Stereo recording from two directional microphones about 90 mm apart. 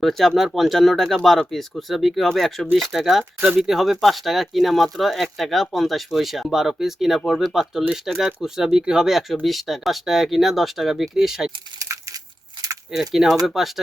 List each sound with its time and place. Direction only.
0.0 s speech: centre (ahead or behind)
11.8 s crumpling: 40° right (ahead or behind)
13.0 s speech: 5° right (ahead or behind)